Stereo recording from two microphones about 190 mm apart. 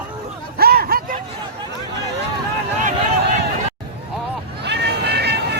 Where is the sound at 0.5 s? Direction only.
55° right (ahead or behind).